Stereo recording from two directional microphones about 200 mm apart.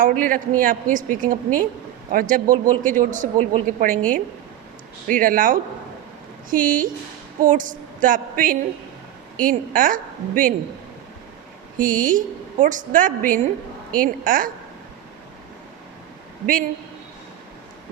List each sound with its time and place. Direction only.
0.0 s a woman's voice: 40° right (ahead or behind)
5.0 s a woman's voice: 45° right (ahead or behind)
11.8 s a man's voice: 40° right (ahead or behind)